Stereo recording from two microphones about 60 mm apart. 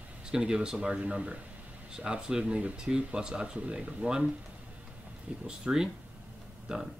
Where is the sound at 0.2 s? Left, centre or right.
Centre.